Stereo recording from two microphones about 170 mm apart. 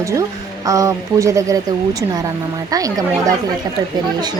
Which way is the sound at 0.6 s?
20° right (ahead or behind).